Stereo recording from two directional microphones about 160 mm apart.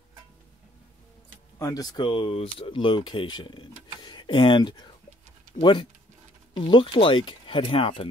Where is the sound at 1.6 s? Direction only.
25° left (ahead or behind).